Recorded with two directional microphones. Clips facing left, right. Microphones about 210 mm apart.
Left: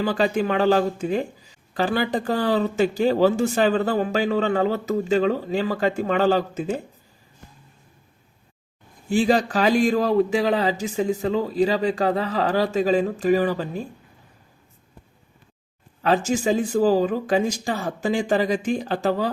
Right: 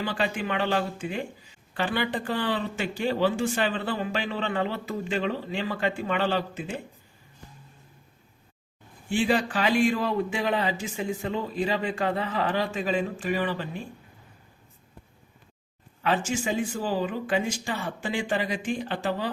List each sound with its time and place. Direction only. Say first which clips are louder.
0.0 s speech: left 7 dB; 40° left (ahead or behind)
9.0 s speech: left 5 dB; 40° left (ahead or behind)
16.0 s speech: left 6 dB; 40° left (ahead or behind)